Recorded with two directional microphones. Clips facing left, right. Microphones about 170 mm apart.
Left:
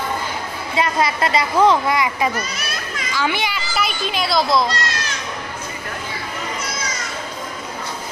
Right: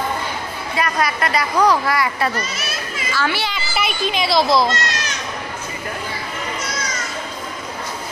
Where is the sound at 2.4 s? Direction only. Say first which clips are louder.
Right 1 dB; centre (ahead or behind).